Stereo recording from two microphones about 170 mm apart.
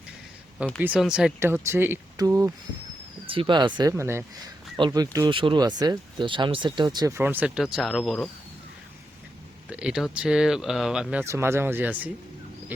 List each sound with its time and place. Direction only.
0.8 s speech: 5° right (ahead or behind)
1.4 s speech: 15° right (ahead or behind)
3.2 s speech: 30° right (ahead or behind)
7.2 s speech: 10° right (ahead or behind)
9.6 s speech: 5° right (ahead or behind)